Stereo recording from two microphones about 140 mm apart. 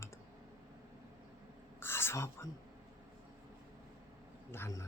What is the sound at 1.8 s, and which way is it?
Whispering, 15° left (ahead or behind).